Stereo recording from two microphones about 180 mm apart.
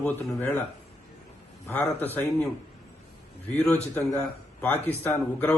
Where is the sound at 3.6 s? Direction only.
10° left (ahead or behind).